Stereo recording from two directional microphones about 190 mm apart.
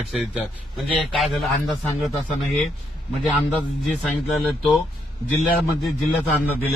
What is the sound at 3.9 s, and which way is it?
Speech, 5° left (ahead or behind).